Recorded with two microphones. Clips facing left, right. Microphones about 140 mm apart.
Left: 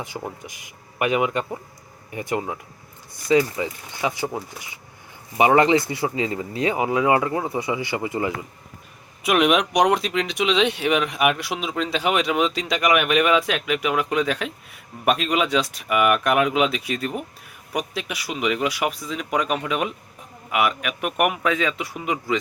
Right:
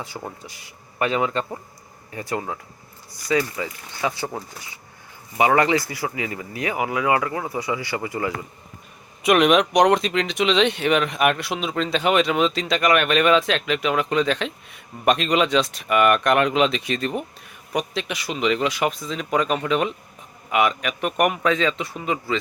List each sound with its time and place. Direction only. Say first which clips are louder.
0.4 s speech: left 1 dB; 15° left (ahead or behind)
5.4 s speech: left 2 dB; 20° left (ahead or behind)
9.2 s speech: right 2 dB; 5° left (ahead or behind)